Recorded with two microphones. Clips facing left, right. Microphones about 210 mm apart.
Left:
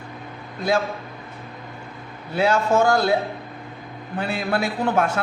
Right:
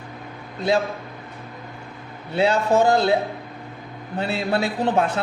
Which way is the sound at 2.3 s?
25° right (ahead or behind).